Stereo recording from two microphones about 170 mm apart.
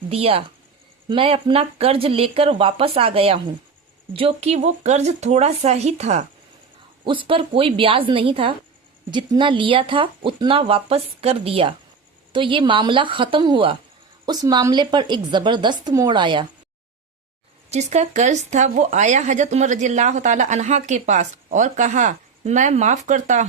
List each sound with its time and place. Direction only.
0.1 s speech: 35° right (ahead or behind)
7.0 s speech: 30° right (ahead or behind)
17.7 s speech: 40° right (ahead or behind)